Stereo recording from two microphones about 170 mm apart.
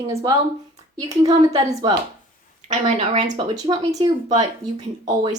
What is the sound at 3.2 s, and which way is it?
Speech, 20° right (ahead or behind).